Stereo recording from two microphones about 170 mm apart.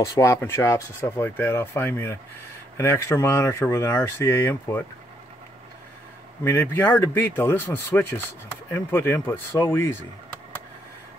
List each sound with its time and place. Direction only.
0.0 s speech: 15° left (ahead or behind)
6.4 s speech: 10° left (ahead or behind)